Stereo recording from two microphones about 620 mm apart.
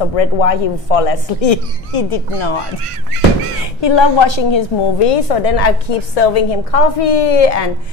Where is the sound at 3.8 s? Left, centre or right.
Left.